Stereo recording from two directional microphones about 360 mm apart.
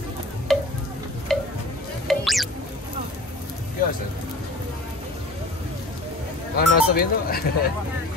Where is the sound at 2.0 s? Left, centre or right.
Centre.